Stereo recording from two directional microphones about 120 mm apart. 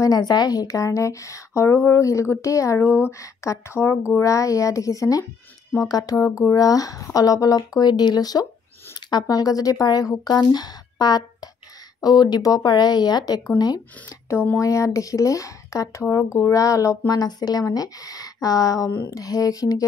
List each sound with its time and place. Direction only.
0.0 s speech: 35° left (ahead or behind)
14.0 s speech: 20° left (ahead or behind)
18.9 s a sound: 15° left (ahead or behind)
19.1 s speech: 30° left (ahead or behind)